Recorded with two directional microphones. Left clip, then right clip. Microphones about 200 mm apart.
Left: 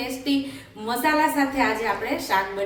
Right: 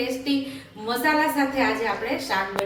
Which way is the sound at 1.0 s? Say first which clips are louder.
Left 1 dB; 5° left (ahead or behind).